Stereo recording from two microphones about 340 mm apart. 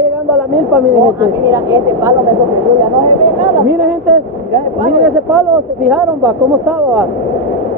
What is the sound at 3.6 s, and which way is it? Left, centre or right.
Speech, centre.